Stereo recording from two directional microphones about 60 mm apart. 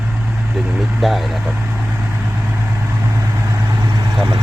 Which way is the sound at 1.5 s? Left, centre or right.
Right.